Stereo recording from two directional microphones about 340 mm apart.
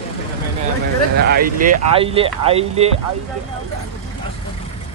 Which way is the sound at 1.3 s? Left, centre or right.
Right.